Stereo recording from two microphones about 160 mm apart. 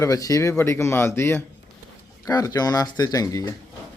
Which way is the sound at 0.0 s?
20° left (ahead or behind).